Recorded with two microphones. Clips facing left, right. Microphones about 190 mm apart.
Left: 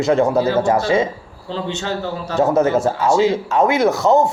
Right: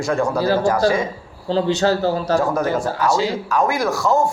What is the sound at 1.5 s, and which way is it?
Mantra, 40° right (ahead or behind).